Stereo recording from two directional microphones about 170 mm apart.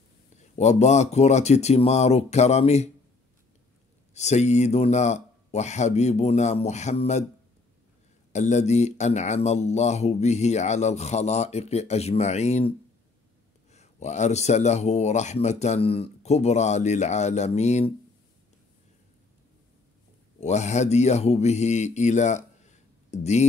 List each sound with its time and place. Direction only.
0.6 s speech: 40° left (ahead or behind)
4.1 s speech: 40° left (ahead or behind)
8.3 s speech: 45° left (ahead or behind)
20.3 s speech: 40° left (ahead or behind)